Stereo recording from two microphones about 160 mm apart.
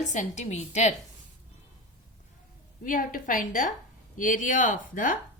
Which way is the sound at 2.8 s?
60° left (ahead or behind).